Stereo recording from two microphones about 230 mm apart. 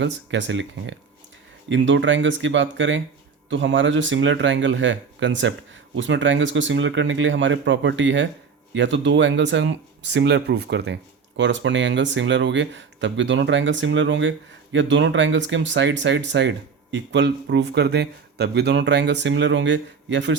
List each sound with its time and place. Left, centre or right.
0.0 s speech: right